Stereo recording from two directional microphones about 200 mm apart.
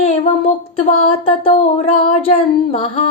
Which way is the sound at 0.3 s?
30° left (ahead or behind).